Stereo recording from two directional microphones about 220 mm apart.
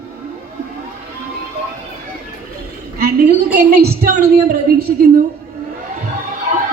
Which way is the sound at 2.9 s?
45° right (ahead or behind).